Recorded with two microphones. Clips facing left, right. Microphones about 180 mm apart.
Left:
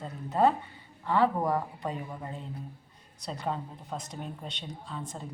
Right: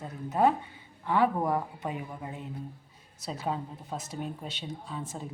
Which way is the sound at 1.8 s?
20° right (ahead or behind).